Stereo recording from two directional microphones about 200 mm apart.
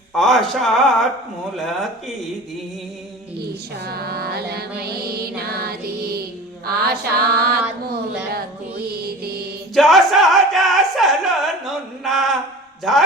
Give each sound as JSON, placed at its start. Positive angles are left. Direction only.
{"t": 0.1, "sound": "speech", "side_deg": 0}
{"t": 3.8, "sound": "mantra", "side_deg": -50}
{"t": 4.8, "sound": "music", "side_deg": -50}
{"t": 6.7, "sound": "mantra", "side_deg": -50}
{"t": 8.8, "sound": "mantra", "side_deg": -50}
{"t": 9.7, "sound": "music", "side_deg": 0}
{"t": 12.9, "sound": "speech", "side_deg": 0}